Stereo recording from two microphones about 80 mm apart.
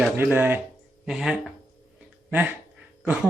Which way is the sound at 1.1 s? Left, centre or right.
Centre.